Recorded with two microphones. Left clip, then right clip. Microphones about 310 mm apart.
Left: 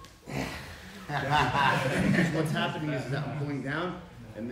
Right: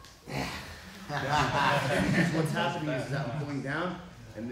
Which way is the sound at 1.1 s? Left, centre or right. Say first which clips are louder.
Left 2 dB; left.